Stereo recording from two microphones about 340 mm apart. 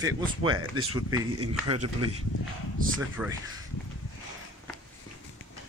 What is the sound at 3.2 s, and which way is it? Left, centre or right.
Speech, centre.